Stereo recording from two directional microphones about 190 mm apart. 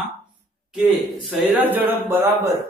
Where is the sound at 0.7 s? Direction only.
5° right (ahead or behind).